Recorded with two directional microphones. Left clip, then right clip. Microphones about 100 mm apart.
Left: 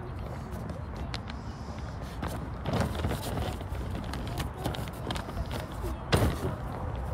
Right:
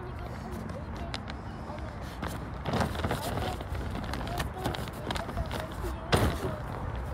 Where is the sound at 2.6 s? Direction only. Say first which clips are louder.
Right 2 dB; 5° right (ahead or behind).